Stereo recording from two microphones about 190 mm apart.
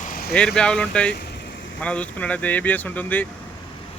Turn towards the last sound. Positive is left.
turn(degrees=10)  # may be behind; listen again after turning